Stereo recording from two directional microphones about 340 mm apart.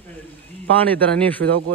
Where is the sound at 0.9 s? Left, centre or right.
Centre.